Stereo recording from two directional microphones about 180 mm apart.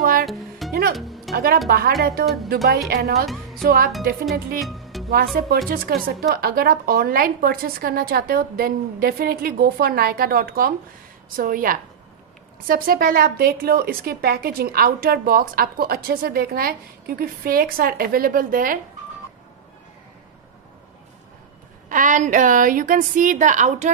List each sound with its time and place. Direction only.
0.2 s music: centre (ahead or behind)
1.3 s a woman's voice: 55° right (ahead or behind)
4.6 s music: centre (ahead or behind)
5.1 s a woman's voice: 55° right (ahead or behind)
21.8 s a woman's voice: 45° right (ahead or behind)